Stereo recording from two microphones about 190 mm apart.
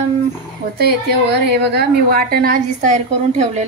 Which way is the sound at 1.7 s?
50° right (ahead or behind).